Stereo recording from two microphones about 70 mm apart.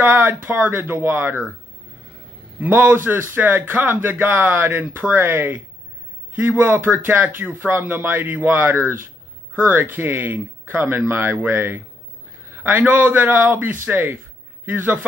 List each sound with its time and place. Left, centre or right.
0.0 s speech: right
2.6 s speech: right
12.5 s a sound: right
12.8 s speech: right